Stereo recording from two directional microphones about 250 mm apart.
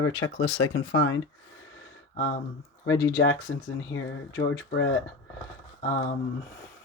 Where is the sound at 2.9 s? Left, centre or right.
Centre.